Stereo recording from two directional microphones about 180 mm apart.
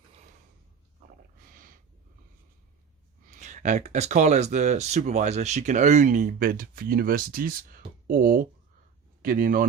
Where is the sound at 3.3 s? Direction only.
40° right (ahead or behind).